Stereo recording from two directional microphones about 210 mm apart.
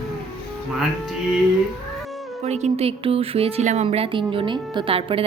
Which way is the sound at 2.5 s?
30° right (ahead or behind).